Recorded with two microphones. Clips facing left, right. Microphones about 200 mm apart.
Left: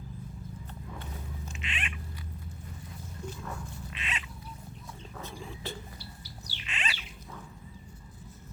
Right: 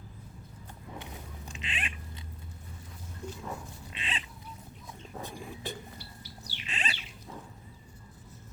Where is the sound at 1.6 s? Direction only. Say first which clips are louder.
Right 1 dB; 30° right (ahead or behind).